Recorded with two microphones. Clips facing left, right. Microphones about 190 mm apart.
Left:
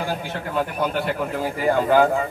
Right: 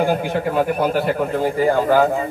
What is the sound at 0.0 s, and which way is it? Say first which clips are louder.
Speech: right 9 dB; 55° right (ahead or behind).